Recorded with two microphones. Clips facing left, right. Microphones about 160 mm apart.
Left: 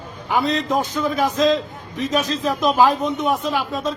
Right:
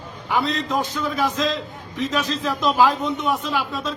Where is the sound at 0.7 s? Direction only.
45° left (ahead or behind).